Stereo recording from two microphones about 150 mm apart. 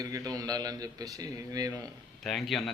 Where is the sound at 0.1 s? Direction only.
25° right (ahead or behind).